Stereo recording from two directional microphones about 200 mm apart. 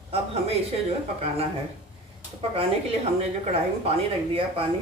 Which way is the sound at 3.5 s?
30° right (ahead or behind).